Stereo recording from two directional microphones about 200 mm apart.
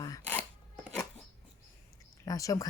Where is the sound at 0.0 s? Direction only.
15° left (ahead or behind).